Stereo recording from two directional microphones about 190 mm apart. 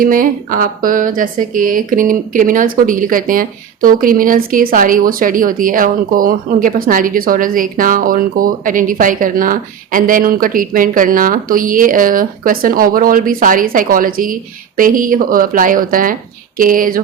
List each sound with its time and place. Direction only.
0.0 s speech: 45° right (ahead or behind)